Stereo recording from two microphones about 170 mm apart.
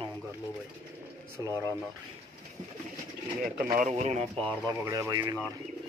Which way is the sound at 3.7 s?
45° right (ahead or behind).